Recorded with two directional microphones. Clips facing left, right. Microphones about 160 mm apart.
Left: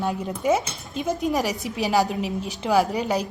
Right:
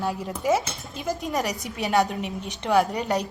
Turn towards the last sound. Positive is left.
turn(degrees=0)  # may be behind; listen again after turning